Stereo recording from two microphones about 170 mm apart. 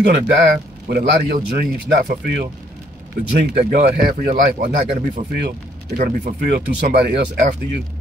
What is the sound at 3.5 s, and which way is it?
Speech, 65° right (ahead or behind).